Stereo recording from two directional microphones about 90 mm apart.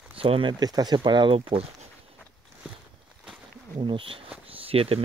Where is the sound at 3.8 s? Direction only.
70° right (ahead or behind).